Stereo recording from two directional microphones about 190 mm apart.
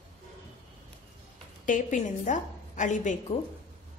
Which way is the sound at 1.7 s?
40° left (ahead or behind).